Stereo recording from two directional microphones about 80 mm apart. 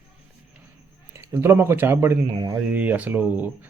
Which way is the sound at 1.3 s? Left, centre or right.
Right.